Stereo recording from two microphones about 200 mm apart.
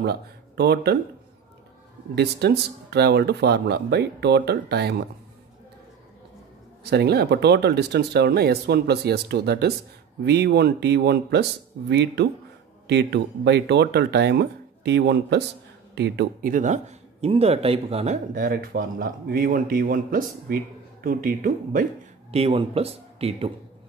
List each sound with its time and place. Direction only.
0.0 s speech: 55° right (ahead or behind)
2.1 s speech: 55° right (ahead or behind)
6.8 s speech: 55° right (ahead or behind)
16.5 s speech: 35° right (ahead or behind)
22.3 s speech: 30° right (ahead or behind)